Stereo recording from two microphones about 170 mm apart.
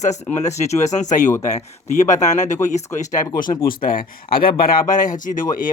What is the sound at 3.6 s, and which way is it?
Speech, 60° left (ahead or behind).